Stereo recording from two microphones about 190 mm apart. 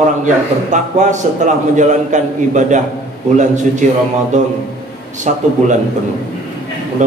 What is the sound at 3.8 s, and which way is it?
Speech, 40° right (ahead or behind).